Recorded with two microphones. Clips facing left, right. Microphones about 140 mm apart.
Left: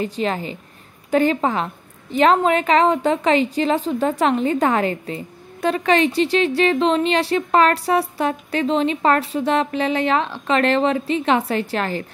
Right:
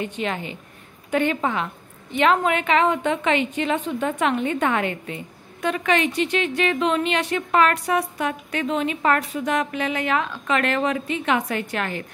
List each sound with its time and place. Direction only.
0.0 s a woman's voice: 35° left (ahead or behind)